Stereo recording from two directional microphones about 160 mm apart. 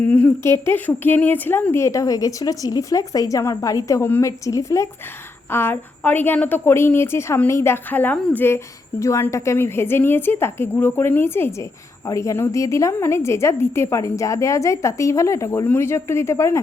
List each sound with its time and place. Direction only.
0.1 s a woman's voice: 10° left (ahead or behind)